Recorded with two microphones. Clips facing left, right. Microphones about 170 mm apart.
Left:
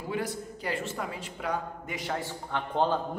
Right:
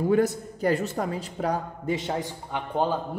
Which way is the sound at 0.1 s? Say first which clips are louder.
Right 7 dB; 45° right (ahead or behind).